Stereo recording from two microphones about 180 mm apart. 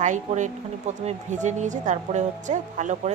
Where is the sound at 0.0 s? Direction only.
40° right (ahead or behind).